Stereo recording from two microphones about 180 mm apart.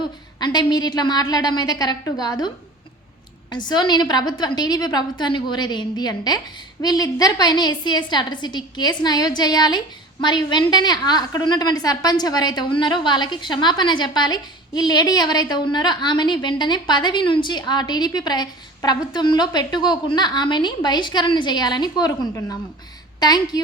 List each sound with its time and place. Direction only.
0.3 s a woman's voice: 25° left (ahead or behind)
3.5 s a woman's voice: 25° left (ahead or behind)